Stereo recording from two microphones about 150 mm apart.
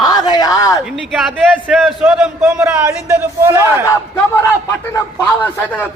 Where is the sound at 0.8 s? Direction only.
5° right (ahead or behind).